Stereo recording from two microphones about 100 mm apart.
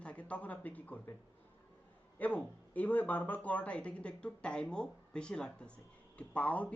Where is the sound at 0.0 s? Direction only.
15° left (ahead or behind).